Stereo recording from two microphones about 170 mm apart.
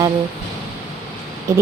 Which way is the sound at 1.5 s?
15° right (ahead or behind).